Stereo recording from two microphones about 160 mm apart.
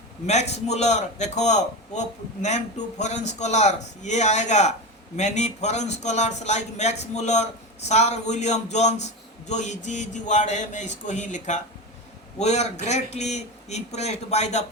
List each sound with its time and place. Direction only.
0.3 s a man's voice: 45° left (ahead or behind)